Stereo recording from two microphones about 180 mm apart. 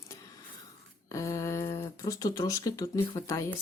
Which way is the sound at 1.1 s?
20° left (ahead or behind).